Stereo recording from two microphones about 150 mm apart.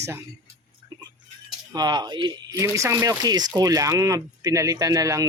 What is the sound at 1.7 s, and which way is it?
Speech, 30° right (ahead or behind).